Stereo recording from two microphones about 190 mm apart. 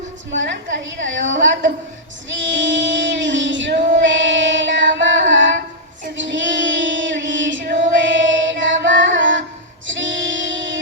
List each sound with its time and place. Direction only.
1.0 s a woman's voice: 75° right (ahead or behind)
2.3 s female singing: 75° right (ahead or behind)
9.8 s music: 75° right (ahead or behind)